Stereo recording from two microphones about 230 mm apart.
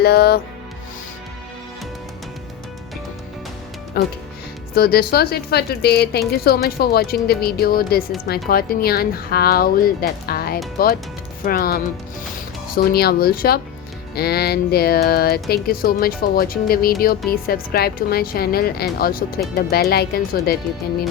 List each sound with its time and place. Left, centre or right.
0.0 s a woman's voice: left
4.0 s a woman's voice: left